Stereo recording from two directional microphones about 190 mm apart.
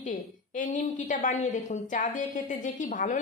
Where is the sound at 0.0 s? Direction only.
40° left (ahead or behind).